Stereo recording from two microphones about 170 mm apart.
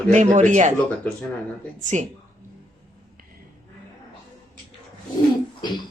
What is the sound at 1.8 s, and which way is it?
Speech, 45° right (ahead or behind).